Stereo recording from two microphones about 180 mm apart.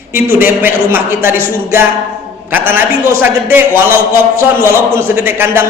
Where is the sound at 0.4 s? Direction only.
10° right (ahead or behind).